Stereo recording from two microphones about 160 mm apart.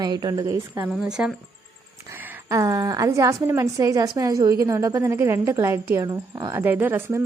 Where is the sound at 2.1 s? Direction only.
20° right (ahead or behind).